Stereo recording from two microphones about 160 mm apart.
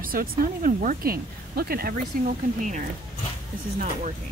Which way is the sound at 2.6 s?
50° right (ahead or behind).